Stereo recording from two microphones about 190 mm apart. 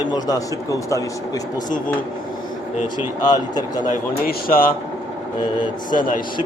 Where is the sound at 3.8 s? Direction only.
50° left (ahead or behind).